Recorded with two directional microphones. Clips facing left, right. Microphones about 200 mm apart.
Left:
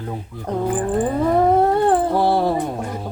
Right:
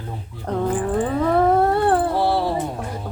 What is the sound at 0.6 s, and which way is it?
Speech, 15° left (ahead or behind).